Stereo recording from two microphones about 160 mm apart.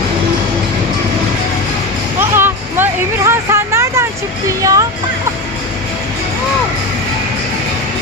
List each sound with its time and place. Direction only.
2.3 s music: 15° right (ahead or behind)
4.4 s speech: 20° right (ahead or behind)